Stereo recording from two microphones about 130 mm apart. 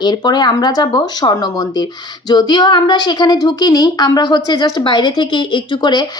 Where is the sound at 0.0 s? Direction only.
30° left (ahead or behind).